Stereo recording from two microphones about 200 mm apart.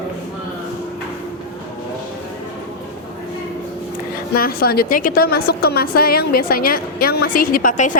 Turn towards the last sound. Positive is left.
turn(degrees=40)  # may be behind; listen again after turning